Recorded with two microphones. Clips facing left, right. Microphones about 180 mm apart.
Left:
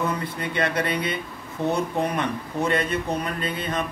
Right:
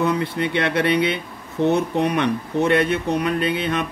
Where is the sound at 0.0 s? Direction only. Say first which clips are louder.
Right 6 dB; 75° right (ahead or behind).